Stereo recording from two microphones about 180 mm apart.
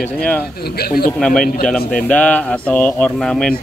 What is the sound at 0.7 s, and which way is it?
Speech, 60° left (ahead or behind).